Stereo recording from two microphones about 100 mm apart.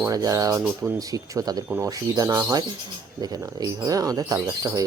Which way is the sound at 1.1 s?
40° right (ahead or behind).